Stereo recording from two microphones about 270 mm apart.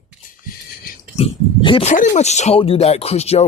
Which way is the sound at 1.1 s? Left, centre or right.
Centre.